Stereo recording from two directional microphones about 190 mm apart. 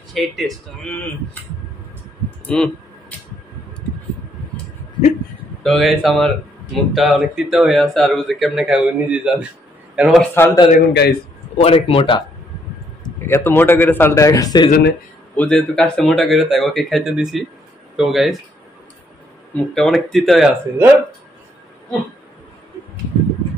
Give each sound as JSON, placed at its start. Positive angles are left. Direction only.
{"t": 0.1, "sound": "speech", "side_deg": 0}
{"t": 2.4, "sound": "a sound", "side_deg": 5}
{"t": 5.6, "sound": "speech", "side_deg": 0}
{"t": 10.3, "sound": "speech", "side_deg": 10}
{"t": 10.9, "sound": "a man's voice", "side_deg": 60}
{"t": 11.5, "sound": "speech", "side_deg": 30}
{"t": 13.3, "sound": "speech", "side_deg": 10}
{"t": 14.7, "sound": "a man's voice", "side_deg": 60}
{"t": 15.3, "sound": "speech", "side_deg": 5}
{"t": 19.5, "sound": "speech", "side_deg": 5}